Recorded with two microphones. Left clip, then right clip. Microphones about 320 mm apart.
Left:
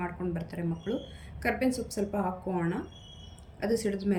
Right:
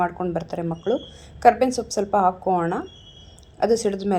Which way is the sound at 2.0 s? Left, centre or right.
Right.